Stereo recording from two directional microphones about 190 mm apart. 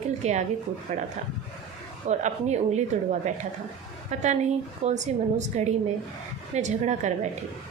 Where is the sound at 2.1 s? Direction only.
40° right (ahead or behind).